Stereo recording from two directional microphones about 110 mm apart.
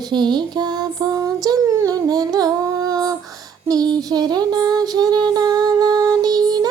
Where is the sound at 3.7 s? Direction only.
35° right (ahead or behind).